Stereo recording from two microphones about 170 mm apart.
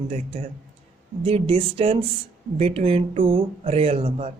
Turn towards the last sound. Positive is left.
turn(degrees=-40)  # may be behind; listen again after turning